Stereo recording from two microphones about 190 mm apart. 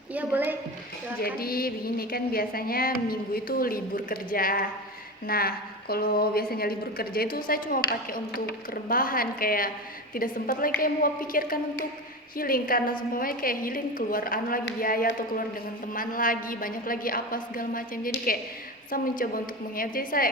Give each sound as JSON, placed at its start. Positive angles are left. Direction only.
{"t": 0.1, "sound": "a woman's voice", "side_deg": -10}
{"t": 1.2, "sound": "a woman's voice", "side_deg": 50}